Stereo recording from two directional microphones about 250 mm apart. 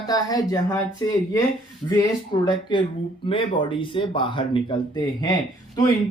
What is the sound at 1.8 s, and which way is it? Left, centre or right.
Speech, centre.